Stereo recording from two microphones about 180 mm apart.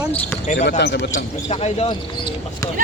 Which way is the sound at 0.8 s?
70° left (ahead or behind).